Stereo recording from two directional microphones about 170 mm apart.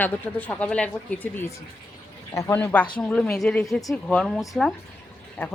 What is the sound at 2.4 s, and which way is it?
Speech, 15° left (ahead or behind).